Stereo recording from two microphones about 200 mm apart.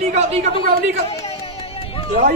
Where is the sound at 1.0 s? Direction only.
30° left (ahead or behind).